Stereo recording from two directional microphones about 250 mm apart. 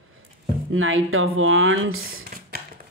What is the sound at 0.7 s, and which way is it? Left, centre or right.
Speech, right.